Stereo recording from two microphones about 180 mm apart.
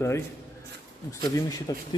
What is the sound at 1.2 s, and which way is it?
Speech, 20° left (ahead or behind).